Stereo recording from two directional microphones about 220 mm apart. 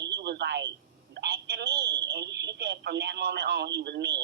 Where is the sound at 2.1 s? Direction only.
50° right (ahead or behind).